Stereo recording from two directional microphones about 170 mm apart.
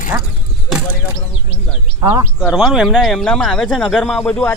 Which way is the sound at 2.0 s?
20° right (ahead or behind).